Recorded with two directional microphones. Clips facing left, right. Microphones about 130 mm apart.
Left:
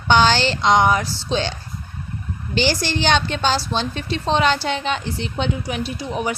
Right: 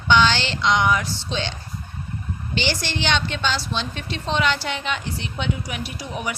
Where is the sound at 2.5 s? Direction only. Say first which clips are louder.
Left 5 dB; 40° left (ahead or behind).